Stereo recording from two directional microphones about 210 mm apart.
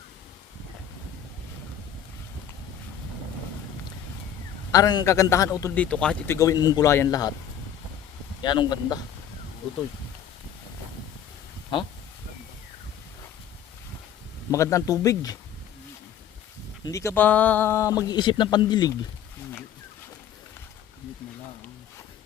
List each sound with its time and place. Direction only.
4.7 s a man's voice: 20° left (ahead or behind)
8.4 s speech: 20° left (ahead or behind)
11.7 s speech: 25° left (ahead or behind)
14.5 s a man's voice: 15° left (ahead or behind)
16.8 s a man's voice: 15° left (ahead or behind)